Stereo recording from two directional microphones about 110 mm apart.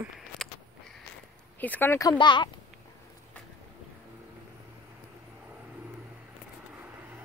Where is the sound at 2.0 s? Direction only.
40° left (ahead or behind).